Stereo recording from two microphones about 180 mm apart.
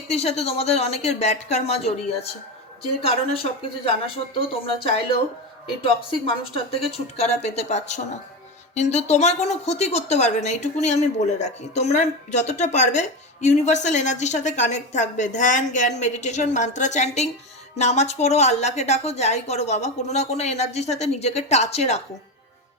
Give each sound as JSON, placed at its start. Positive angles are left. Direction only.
{"t": 0.1, "sound": "a woman's voice", "side_deg": 35}